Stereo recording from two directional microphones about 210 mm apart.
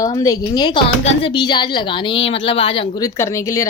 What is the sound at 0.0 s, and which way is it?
Speech, 15° left (ahead or behind).